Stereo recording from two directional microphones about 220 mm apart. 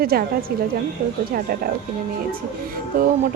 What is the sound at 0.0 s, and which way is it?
Speech, 40° right (ahead or behind).